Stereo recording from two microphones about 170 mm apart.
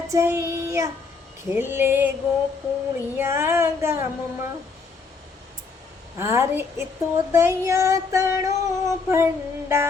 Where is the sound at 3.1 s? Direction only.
15° right (ahead or behind).